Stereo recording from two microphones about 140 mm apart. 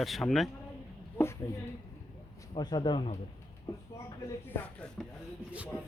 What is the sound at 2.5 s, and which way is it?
Speech, 30° left (ahead or behind).